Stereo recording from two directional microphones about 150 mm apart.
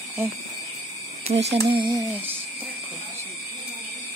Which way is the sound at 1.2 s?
45° right (ahead or behind).